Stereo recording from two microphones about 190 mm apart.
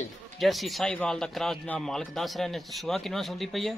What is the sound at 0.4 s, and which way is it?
Speech, centre (ahead or behind).